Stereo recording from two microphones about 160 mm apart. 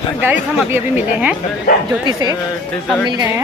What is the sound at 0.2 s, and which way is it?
Speech, 10° right (ahead or behind).